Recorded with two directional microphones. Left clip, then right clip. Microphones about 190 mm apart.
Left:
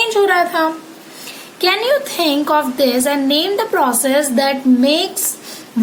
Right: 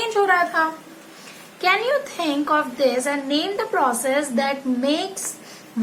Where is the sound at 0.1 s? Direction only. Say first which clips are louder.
Left 5 dB; 30° left (ahead or behind).